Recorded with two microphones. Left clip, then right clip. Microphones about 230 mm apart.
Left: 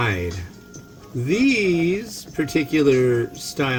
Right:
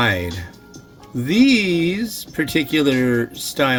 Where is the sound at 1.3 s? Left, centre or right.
Right.